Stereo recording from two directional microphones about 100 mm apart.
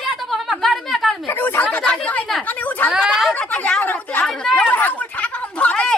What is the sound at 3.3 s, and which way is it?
Chatter, 10° left (ahead or behind).